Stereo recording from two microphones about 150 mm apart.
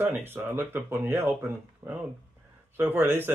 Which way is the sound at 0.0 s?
15° right (ahead or behind).